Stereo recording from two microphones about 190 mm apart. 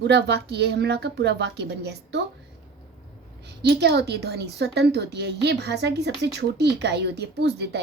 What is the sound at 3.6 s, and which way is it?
A woman's voice, 60° right (ahead or behind).